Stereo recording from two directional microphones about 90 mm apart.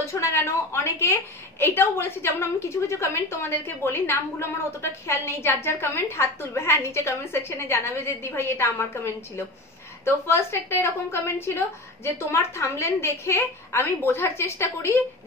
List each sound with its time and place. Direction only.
0.0 s a woman's voice: 30° left (ahead or behind)